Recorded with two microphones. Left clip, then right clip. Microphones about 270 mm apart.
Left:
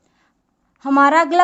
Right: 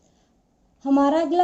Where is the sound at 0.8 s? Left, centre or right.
Left.